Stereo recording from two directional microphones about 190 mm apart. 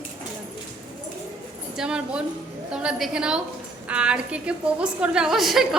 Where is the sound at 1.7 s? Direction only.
5° right (ahead or behind).